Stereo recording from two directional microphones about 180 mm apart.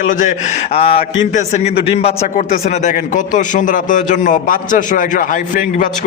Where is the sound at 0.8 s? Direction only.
35° left (ahead or behind).